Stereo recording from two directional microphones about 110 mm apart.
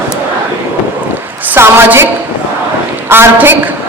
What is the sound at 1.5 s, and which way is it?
Speech, 20° right (ahead or behind).